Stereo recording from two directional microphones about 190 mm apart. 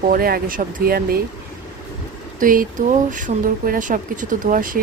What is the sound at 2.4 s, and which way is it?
Speech, 45° right (ahead or behind).